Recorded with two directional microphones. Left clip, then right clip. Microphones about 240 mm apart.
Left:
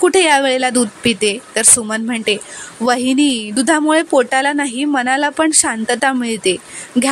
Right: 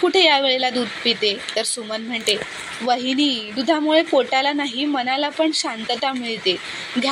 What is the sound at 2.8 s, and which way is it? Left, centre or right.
A woman's voice, left.